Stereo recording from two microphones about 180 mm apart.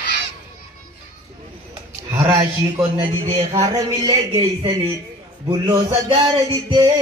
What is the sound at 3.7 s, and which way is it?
A man's voice, 20° right (ahead or behind).